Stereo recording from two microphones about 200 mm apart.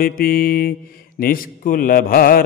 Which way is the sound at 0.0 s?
45° left (ahead or behind).